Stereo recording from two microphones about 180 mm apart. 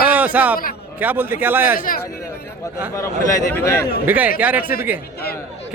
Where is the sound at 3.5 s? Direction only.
15° left (ahead or behind).